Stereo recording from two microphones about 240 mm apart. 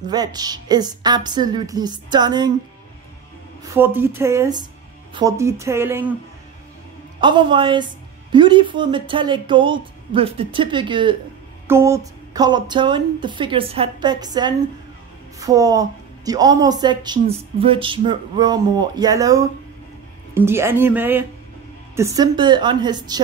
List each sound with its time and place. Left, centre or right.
0.0 s a woman's voice: centre
3.7 s a woman's voice: centre
7.2 s a woman's voice: centre